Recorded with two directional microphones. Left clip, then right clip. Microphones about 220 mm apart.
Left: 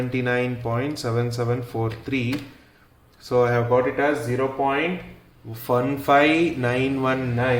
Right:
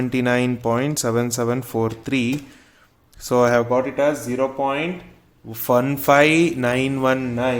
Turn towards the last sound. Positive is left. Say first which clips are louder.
# right 2 dB
turn(degrees=-45)  # may be behind; listen again after turning